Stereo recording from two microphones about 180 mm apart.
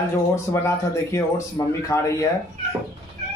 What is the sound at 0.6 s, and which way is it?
Speech, 15° left (ahead or behind).